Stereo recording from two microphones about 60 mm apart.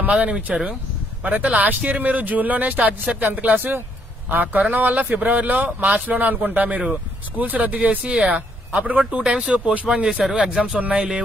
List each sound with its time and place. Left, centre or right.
0.1 s speech: centre
10.8 s speech: centre